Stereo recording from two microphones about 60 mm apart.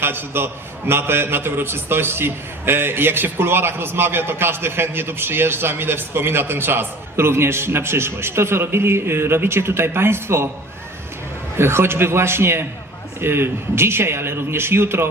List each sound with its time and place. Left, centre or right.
0.0 s a man's voice: right
11.5 s a man's voice: right